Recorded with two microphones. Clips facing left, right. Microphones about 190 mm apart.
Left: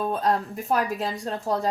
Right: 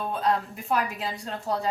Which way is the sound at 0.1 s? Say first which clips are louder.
Left 2 dB; 45° left (ahead or behind).